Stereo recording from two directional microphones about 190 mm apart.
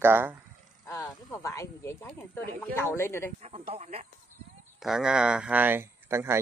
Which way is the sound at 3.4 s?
35° right (ahead or behind).